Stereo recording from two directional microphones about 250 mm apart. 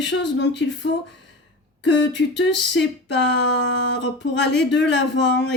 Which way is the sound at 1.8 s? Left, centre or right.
Left.